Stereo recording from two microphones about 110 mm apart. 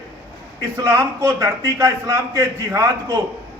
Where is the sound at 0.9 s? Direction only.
20° right (ahead or behind).